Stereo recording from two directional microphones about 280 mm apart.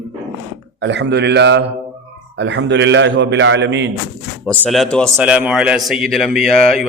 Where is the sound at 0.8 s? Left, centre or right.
Right.